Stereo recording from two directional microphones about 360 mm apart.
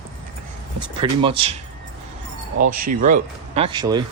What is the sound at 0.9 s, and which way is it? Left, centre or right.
Speech, centre.